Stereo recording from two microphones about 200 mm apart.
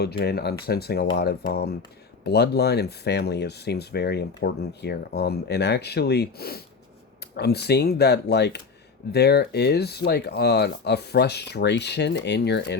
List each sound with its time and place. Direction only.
0.0 s speech: 55° left (ahead or behind)